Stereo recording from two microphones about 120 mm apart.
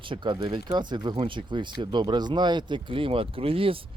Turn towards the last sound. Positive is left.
turn(degrees=-50)  # may be behind; listen again after turning